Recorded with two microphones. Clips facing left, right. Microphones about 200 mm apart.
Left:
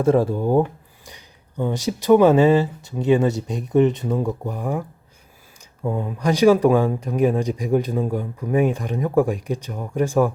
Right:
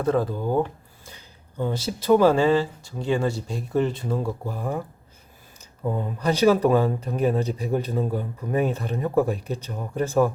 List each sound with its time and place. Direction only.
0.0 s speech: 25° left (ahead or behind)
1.0 s speech: 15° left (ahead or behind)